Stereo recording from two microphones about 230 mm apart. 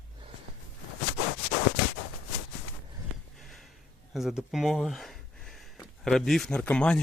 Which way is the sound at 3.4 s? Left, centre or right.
Centre.